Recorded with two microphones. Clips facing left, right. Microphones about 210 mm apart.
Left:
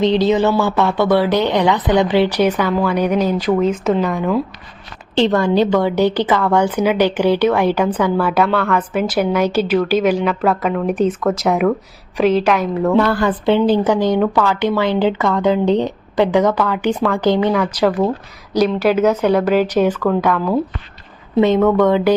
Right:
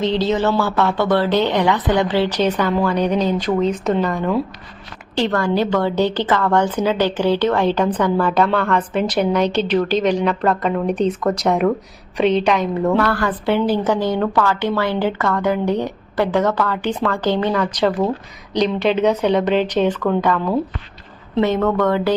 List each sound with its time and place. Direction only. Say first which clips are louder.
0.0 s a woman's voice: left 4 dB; 15° left (ahead or behind)
5.1 s a woman's voice: left 4 dB; 25° left (ahead or behind); by 12.9 s 5° left (ahead or behind)
13.0 s a woman's voice: left 3 dB; 20° left (ahead or behind); by 20.6 s 5° left (ahead or behind)
21.4 s a woman's voice: left 4 dB; 15° left (ahead or behind)